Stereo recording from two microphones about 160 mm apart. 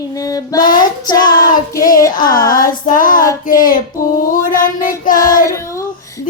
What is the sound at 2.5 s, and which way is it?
Music, 60° left (ahead or behind).